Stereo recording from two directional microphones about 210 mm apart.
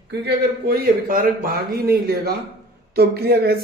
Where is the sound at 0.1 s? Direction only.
50° right (ahead or behind).